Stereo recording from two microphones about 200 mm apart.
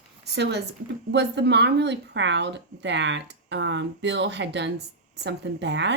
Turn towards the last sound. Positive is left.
turn(degrees=-60)  # may be behind; listen again after turning